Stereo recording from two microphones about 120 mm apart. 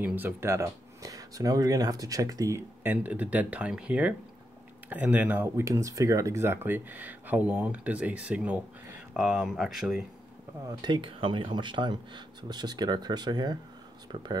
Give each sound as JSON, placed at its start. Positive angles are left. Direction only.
{"t": 0.0, "sound": "speech", "side_deg": -15}
{"t": 5.6, "sound": "speech", "side_deg": -25}
{"t": 10.7, "sound": "speech", "side_deg": -40}